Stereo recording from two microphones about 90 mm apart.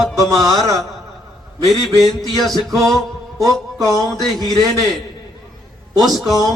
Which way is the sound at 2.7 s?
40° right (ahead or behind).